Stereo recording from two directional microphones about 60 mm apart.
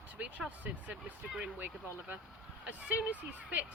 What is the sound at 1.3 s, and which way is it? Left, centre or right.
Speech, centre.